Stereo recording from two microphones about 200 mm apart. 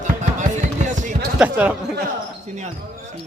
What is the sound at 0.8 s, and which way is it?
Basketball bounce, 40° right (ahead or behind).